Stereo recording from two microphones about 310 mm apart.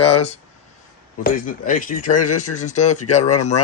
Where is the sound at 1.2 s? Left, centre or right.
Left.